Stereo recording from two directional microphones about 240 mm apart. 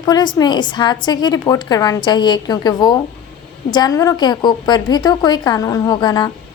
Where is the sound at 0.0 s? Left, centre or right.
Centre.